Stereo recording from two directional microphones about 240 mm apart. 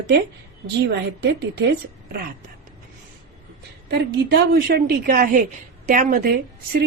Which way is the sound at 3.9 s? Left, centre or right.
Right.